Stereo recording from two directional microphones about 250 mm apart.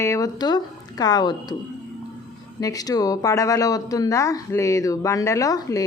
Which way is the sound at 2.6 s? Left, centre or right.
Centre.